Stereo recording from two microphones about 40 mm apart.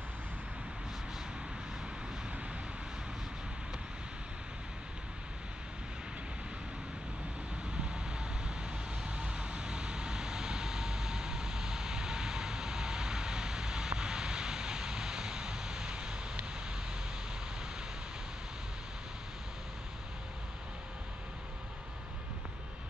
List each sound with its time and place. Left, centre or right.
7.8 s vehicle: right